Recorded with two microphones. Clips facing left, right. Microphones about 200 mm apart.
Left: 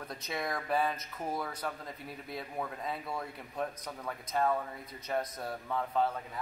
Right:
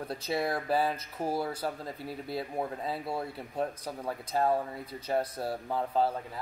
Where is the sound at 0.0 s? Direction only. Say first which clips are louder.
Right 6 dB; 30° right (ahead or behind).